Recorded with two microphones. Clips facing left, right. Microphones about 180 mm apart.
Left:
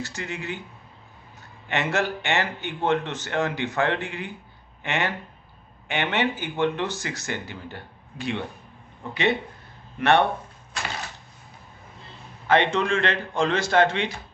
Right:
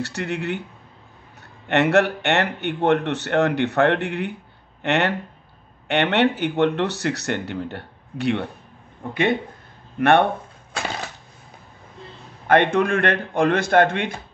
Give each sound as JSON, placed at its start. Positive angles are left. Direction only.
{"t": 0.0, "sound": "speech", "side_deg": -65}
{"t": 1.7, "sound": "a man's voice", "side_deg": -65}
{"t": 9.1, "sound": "speech", "side_deg": -50}
{"t": 12.4, "sound": "a man's voice", "side_deg": -55}